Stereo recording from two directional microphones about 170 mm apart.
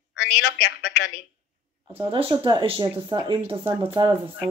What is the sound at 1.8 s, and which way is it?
Speech, 30° right (ahead or behind).